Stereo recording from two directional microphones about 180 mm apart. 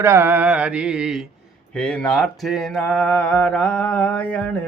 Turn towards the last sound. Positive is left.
turn(degrees=10)  # may be behind; listen again after turning